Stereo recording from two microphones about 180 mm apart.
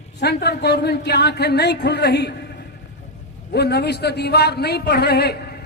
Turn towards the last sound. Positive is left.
turn(degrees=65)  # may be behind; listen again after turning